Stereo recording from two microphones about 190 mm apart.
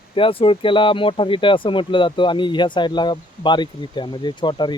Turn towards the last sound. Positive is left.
turn(degrees=25)  # may be behind; listen again after turning